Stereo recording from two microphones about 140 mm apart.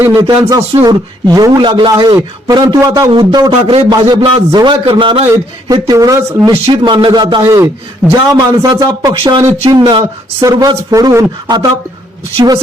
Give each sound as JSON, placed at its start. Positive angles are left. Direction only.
{"t": 0.2, "sound": "a man's voice", "side_deg": -25}
{"t": 5.3, "sound": "a man's voice", "side_deg": -25}
{"t": 6.5, "sound": "speech", "side_deg": -35}
{"t": 7.4, "sound": "a man's voice", "side_deg": -20}
{"t": 9.6, "sound": "speech", "side_deg": -30}